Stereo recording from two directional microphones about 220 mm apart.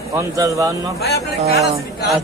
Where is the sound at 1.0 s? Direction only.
45° left (ahead or behind).